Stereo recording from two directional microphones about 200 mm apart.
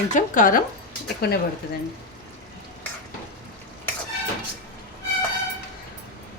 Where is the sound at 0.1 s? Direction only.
40° left (ahead or behind).